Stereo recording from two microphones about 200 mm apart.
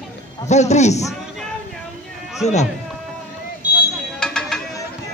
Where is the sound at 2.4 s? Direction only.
35° left (ahead or behind).